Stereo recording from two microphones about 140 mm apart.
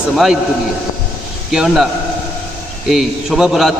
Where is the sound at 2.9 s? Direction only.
Centre (ahead or behind).